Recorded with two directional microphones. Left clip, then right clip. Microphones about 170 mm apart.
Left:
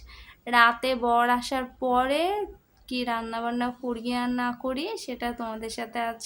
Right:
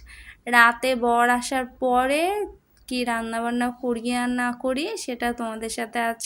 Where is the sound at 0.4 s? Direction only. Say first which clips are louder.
Right 3 dB; 20° right (ahead or behind).